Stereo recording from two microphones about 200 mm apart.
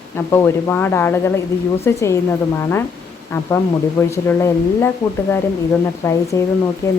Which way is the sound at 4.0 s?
15° left (ahead or behind).